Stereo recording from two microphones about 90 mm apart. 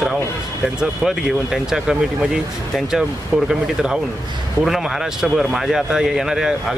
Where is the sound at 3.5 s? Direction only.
5° right (ahead or behind).